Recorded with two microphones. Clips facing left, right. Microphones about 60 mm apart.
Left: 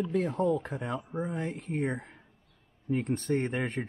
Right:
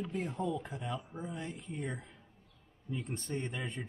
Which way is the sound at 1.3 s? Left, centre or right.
Left.